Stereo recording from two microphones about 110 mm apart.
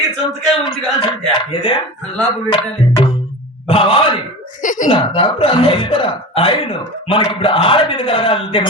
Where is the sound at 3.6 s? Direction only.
55° left (ahead or behind).